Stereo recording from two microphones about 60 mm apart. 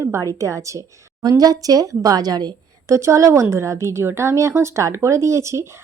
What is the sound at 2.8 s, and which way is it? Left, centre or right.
A woman's voice, right.